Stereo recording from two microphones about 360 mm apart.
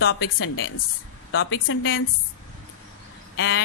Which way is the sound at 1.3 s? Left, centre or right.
Left.